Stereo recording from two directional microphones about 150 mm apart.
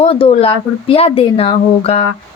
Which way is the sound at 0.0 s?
40° left (ahead or behind).